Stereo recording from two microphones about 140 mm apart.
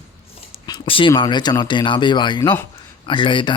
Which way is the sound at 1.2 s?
30° left (ahead or behind).